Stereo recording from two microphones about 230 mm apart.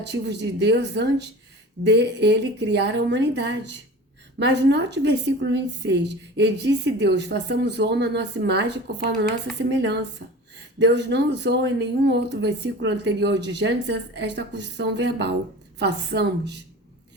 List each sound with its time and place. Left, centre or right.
0.0 s a woman's voice: right